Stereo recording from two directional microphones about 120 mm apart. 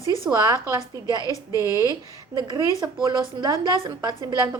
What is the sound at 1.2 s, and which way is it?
Speech, 30° left (ahead or behind).